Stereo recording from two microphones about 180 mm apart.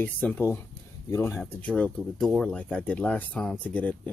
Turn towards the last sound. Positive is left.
turn(degrees=10)  # may be behind; listen again after turning